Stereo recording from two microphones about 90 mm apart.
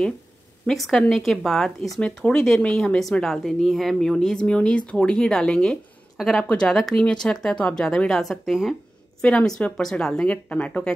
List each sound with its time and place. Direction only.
0.7 s speech: centre (ahead or behind)
9.2 s speech: 10° left (ahead or behind)